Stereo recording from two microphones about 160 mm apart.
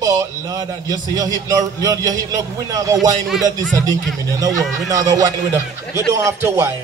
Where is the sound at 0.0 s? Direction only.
20° right (ahead or behind).